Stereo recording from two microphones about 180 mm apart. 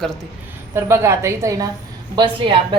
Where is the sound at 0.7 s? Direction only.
15° right (ahead or behind).